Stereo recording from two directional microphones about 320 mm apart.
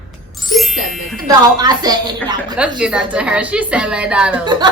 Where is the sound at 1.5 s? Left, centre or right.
Centre.